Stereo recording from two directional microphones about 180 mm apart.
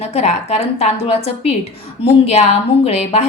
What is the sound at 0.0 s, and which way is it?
A woman's voice, 35° left (ahead or behind).